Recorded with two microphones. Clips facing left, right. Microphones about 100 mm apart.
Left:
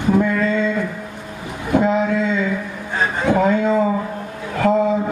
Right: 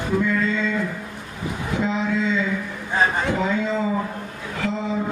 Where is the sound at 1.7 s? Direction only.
50° left (ahead or behind).